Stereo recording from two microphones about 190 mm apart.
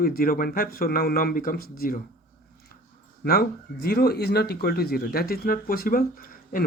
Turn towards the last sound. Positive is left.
turn(degrees=50)  # may be behind; listen again after turning